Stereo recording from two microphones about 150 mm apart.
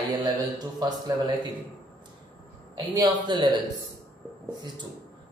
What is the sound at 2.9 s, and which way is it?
Speech, 25° right (ahead or behind).